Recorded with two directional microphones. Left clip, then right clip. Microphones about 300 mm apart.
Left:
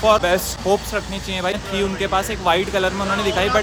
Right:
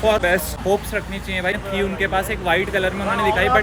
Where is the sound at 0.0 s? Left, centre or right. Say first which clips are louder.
Left 2 dB; centre.